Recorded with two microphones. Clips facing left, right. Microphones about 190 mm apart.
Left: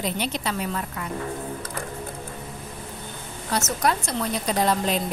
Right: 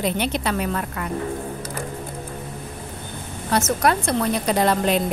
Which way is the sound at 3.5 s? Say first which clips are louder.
Right 4 dB; 55° right (ahead or behind).